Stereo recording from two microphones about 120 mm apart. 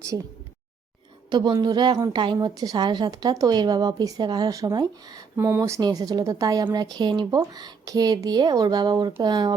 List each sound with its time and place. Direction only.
1.3 s a woman's voice: 40° right (ahead or behind)